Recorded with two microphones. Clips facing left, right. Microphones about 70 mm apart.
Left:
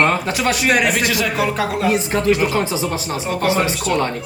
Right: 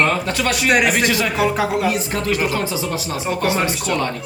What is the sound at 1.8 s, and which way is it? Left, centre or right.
A woman's voice, left.